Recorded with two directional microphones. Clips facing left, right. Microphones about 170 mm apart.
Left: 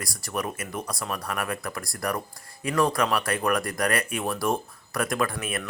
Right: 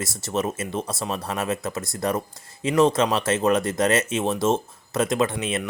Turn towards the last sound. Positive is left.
turn(degrees=-20)  # may be behind; listen again after turning